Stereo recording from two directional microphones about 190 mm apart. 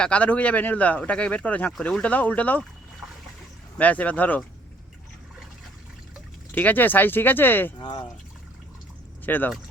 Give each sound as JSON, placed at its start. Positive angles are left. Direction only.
{"t": 0.0, "sound": "speech", "side_deg": 5}
{"t": 3.8, "sound": "speech", "side_deg": 10}
{"t": 6.5, "sound": "speech", "side_deg": 10}
{"t": 7.8, "sound": "speech", "side_deg": 25}
{"t": 9.2, "sound": "speech", "side_deg": 10}